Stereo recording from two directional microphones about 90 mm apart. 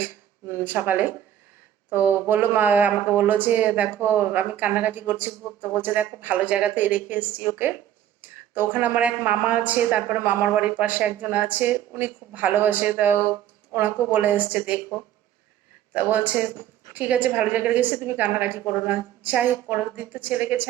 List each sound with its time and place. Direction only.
0.0 s a woman's voice: 25° right (ahead or behind)
2.9 s a woman's voice: 20° left (ahead or behind)
3.2 s a woman's voice: 20° right (ahead or behind)
15.9 s a woman's voice: 20° right (ahead or behind)